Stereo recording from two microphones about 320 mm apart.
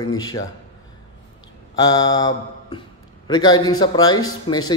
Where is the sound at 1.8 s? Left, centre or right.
Centre.